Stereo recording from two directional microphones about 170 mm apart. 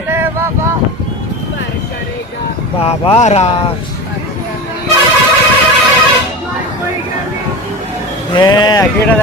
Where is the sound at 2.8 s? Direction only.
35° left (ahead or behind).